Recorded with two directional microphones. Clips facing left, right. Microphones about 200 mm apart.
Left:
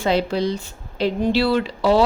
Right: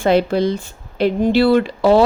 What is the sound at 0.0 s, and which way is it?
Speech, 50° right (ahead or behind).